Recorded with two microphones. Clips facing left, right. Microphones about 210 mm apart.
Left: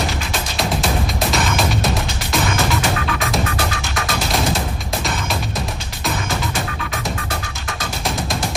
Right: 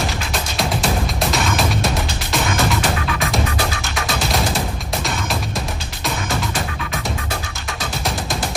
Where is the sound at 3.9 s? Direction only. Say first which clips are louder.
Even; centre (ahead or behind).